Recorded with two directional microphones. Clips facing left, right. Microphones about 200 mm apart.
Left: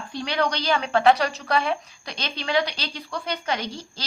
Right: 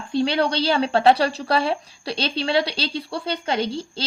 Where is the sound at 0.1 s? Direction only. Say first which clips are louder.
Right 5 dB; 30° right (ahead or behind).